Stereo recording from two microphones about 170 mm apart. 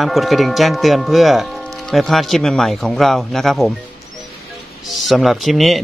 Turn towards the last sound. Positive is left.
turn(degrees=0)  # may be behind; listen again after turning